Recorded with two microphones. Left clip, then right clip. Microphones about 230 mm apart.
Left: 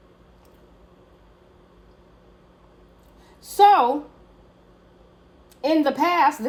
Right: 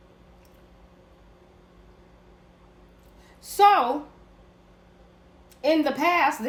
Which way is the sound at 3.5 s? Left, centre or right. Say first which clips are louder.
Left 3 dB; centre.